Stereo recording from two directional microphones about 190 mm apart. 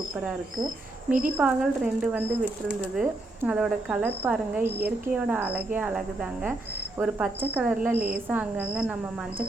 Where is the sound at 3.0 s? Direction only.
5° right (ahead or behind).